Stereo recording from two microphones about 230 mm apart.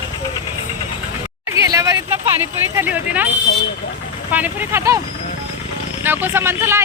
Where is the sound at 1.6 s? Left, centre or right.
Centre.